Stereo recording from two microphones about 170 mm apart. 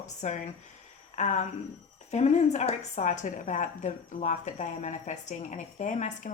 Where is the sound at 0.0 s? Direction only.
45° left (ahead or behind).